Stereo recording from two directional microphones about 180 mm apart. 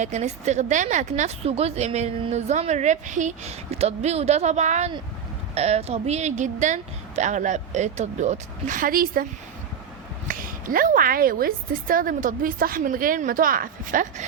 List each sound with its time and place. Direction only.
0.0 s a woman's voice: 40° right (ahead or behind)
10.2 s a woman's voice: 50° right (ahead or behind)